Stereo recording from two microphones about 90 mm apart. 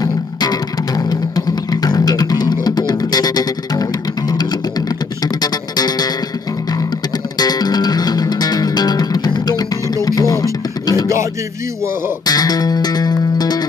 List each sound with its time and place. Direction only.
0.0 s music: 45° left (ahead or behind)
7.3 s music: 45° left (ahead or behind)
12.3 s music: 45° left (ahead or behind)